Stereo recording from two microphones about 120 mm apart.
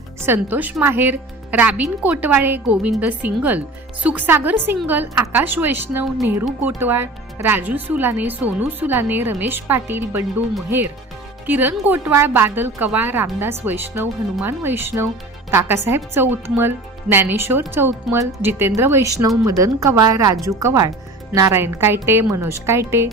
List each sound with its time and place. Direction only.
0.3 s speech: 15° right (ahead or behind)
11.4 s a woman's voice: 15° right (ahead or behind)